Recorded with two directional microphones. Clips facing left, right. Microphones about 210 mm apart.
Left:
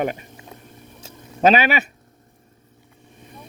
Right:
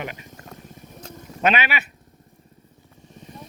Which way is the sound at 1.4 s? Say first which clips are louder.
Left 6 dB; 35° left (ahead or behind).